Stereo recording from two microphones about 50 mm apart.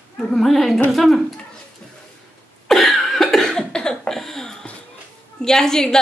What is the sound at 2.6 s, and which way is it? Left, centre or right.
Cough, centre.